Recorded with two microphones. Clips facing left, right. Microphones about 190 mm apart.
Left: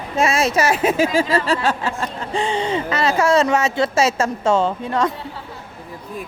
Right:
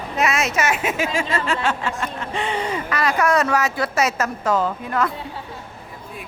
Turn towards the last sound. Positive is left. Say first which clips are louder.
# left 3 dB
turn(degrees=30)  # may be behind; listen again after turning